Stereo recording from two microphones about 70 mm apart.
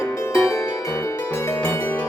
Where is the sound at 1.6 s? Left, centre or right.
Left.